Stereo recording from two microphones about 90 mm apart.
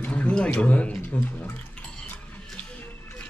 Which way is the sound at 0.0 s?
15° left (ahead or behind).